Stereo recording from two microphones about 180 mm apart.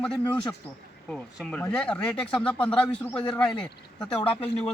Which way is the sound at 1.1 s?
Centre (ahead or behind).